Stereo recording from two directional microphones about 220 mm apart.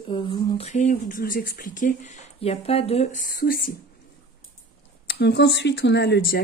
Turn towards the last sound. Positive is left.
turn(degrees=50)  # may be behind; listen again after turning